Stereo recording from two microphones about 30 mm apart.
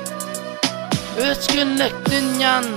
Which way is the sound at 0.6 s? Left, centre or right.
Centre.